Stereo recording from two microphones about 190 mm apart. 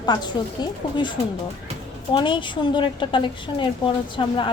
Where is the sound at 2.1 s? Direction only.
25° left (ahead or behind).